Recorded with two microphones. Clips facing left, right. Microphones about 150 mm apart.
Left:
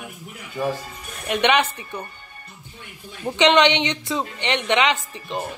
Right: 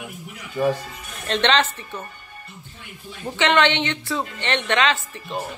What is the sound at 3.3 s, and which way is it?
A woman's voice, 20° left (ahead or behind).